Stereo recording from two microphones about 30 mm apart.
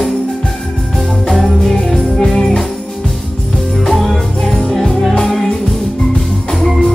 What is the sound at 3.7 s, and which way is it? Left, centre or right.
Music, centre.